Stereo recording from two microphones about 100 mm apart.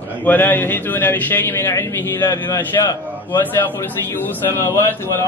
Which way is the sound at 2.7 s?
35° left (ahead or behind).